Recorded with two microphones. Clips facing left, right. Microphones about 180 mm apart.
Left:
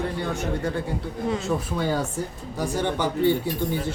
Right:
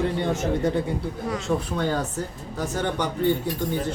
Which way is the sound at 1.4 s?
5° left (ahead or behind).